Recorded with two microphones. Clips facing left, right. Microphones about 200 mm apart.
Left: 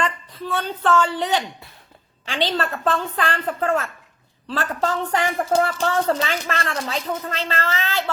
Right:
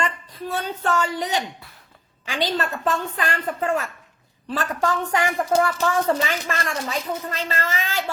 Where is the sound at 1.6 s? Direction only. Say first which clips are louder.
Left 2 dB; 25° left (ahead or behind).